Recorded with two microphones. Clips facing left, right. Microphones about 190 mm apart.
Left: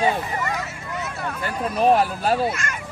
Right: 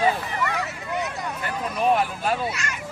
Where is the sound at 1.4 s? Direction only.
35° left (ahead or behind).